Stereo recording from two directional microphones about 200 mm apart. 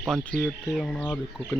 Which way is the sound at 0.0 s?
Centre (ahead or behind).